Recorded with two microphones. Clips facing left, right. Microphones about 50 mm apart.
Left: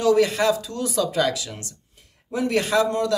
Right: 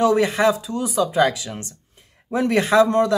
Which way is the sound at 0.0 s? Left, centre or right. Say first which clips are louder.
Right 2 dB; right.